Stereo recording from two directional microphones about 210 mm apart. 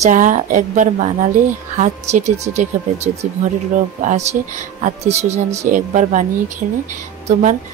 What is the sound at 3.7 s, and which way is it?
Speech, 35° right (ahead or behind).